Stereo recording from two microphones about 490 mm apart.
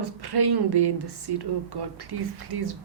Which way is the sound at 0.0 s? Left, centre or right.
Right.